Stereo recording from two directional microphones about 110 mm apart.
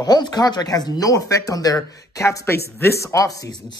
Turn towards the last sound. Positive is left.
turn(degrees=35)  # may be behind; listen again after turning